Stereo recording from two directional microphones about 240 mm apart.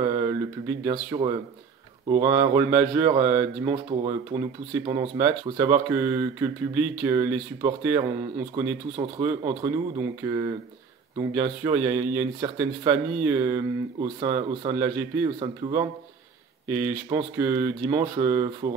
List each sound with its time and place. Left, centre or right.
0.0 s speech: centre